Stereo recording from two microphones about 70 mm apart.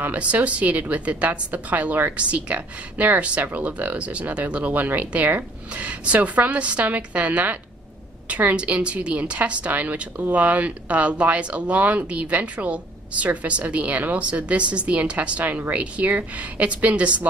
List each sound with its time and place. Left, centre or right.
0.0 s a woman's voice: right